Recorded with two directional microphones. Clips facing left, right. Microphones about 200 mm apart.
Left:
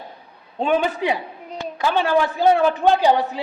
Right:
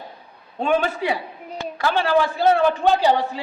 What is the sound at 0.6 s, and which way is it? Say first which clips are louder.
A man's voice: left 1 dB; 15° left (ahead or behind).